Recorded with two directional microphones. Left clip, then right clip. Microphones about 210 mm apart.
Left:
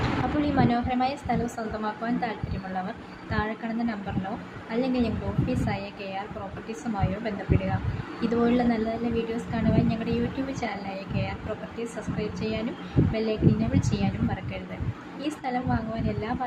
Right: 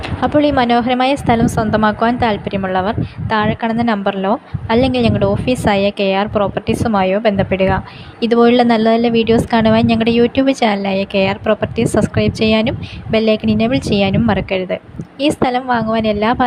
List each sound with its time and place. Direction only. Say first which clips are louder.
0.4 s a woman's voice: right 13 dB; 45° right (ahead or behind)